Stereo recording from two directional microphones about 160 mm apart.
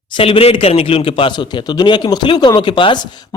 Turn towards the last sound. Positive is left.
turn(degrees=30)  # may be behind; listen again after turning